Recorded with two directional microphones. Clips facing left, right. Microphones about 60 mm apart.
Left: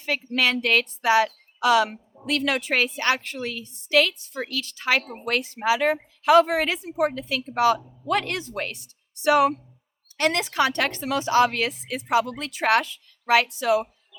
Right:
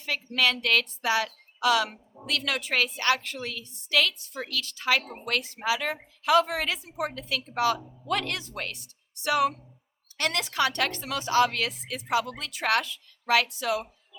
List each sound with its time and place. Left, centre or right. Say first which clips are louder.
0.0 s a woman's voice: left 3 dB; left